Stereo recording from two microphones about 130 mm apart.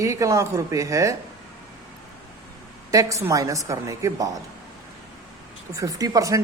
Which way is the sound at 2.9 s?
25° right (ahead or behind).